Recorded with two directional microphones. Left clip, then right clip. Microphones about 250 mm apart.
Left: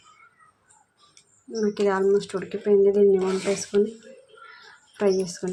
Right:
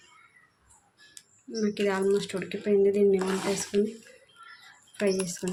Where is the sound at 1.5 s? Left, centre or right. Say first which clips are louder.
Left 5 dB; centre.